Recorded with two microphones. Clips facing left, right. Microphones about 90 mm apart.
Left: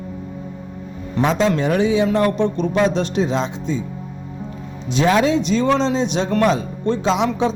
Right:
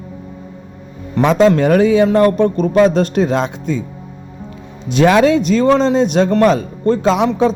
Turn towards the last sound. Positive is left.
turn(degrees=-50)  # may be behind; listen again after turning